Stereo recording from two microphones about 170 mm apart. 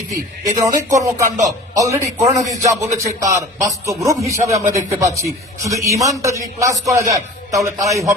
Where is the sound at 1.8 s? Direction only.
20° right (ahead or behind).